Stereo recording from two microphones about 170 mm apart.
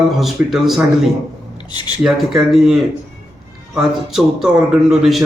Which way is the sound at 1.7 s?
25° left (ahead or behind).